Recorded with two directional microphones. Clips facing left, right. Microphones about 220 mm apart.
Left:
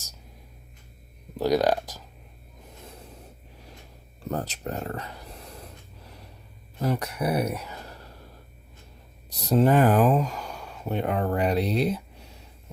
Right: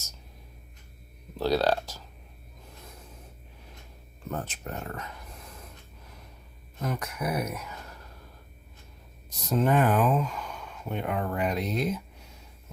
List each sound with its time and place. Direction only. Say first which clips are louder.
1.4 s speech: left 3 dB; 15° left (ahead or behind)
4.2 s a sound: left 4 dB; 35° left (ahead or behind)
6.7 s speech: left 5 dB; 35° left (ahead or behind)
9.4 s speech: left 4 dB; 35° left (ahead or behind)